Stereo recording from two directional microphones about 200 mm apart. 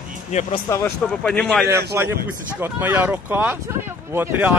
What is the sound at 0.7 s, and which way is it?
Speech, 10° left (ahead or behind).